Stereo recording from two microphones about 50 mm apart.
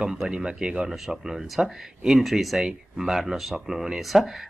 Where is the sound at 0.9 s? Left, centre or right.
Centre.